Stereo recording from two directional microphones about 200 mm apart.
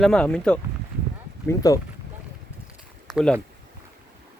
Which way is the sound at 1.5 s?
15° left (ahead or behind).